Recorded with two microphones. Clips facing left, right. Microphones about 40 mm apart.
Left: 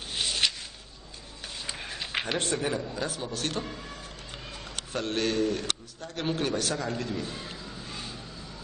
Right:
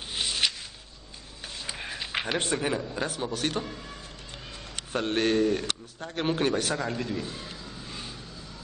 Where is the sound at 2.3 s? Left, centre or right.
Centre.